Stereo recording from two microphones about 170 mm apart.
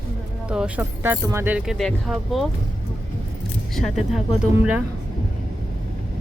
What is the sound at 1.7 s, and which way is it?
Speech, centre (ahead or behind).